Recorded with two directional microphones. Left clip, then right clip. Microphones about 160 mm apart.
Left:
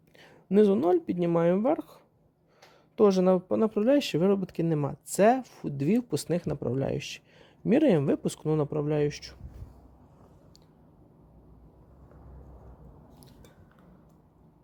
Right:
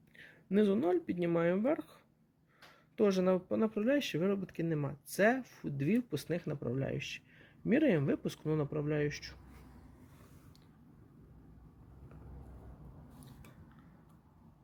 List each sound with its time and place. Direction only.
0.2 s speech: 25° left (ahead or behind)